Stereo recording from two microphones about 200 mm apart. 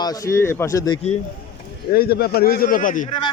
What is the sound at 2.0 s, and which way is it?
Speech, 50° left (ahead or behind).